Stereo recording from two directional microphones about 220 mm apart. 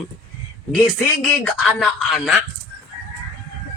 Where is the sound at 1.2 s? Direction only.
5° left (ahead or behind).